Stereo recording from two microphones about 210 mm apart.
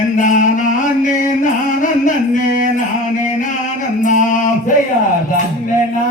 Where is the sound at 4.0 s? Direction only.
35° left (ahead or behind).